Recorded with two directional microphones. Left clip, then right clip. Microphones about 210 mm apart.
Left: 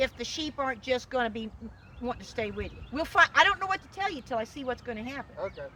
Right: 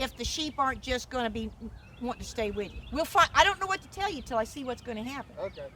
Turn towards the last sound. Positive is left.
turn(degrees=-55)  # may be behind; listen again after turning